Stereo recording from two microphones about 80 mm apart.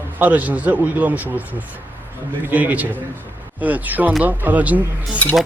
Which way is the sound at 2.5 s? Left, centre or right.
Right.